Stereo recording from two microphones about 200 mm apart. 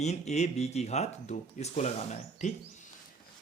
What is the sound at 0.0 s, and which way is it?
Speech, 35° left (ahead or behind).